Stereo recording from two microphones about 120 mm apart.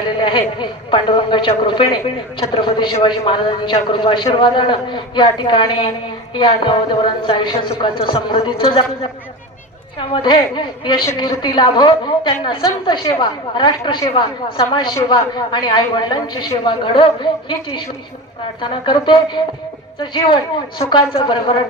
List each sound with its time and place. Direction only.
0.2 s a woman's voice: 40° left (ahead or behind)